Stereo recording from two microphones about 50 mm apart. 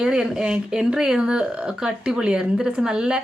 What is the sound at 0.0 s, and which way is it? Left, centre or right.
Speech, centre.